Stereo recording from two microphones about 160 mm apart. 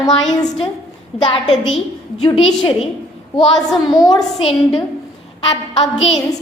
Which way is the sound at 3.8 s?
25° left (ahead or behind).